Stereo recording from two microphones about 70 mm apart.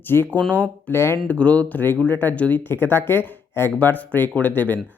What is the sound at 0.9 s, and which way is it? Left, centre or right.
Speech, left.